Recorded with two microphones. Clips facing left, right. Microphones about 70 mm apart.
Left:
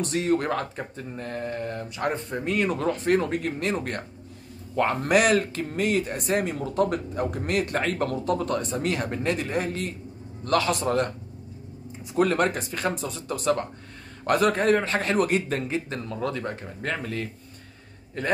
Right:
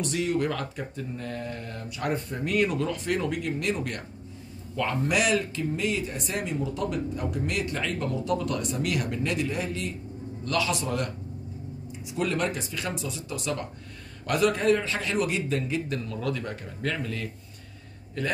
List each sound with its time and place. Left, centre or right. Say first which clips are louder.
0.0 s speech: left 2 dB; left
2.7 s speech: left 5 dB; left
15.7 s speech: even; left